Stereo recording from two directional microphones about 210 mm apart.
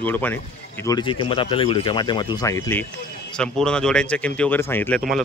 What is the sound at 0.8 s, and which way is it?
Speech, 20° left (ahead or behind).